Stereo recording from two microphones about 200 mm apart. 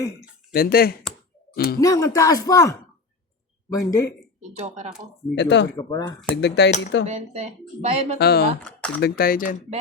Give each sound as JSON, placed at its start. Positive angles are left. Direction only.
{"t": 0.5, "sound": "speech", "side_deg": 50}
{"t": 1.8, "sound": "speech", "side_deg": 15}
{"t": 4.4, "sound": "speech", "side_deg": -35}
{"t": 5.3, "sound": "speech", "side_deg": 60}
{"t": 5.7, "sound": "speech", "side_deg": 15}
{"t": 6.3, "sound": "speech", "side_deg": 60}
{"t": 7.0, "sound": "speech", "side_deg": -35}
{"t": 8.2, "sound": "speech", "side_deg": 55}
{"t": 8.6, "sound": "speech", "side_deg": 5}
{"t": 9.0, "sound": "speech", "side_deg": 50}